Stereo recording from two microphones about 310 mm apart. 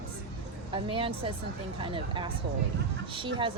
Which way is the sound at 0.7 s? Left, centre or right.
Centre.